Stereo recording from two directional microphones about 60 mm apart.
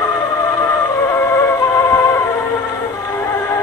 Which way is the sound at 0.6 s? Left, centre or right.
Left.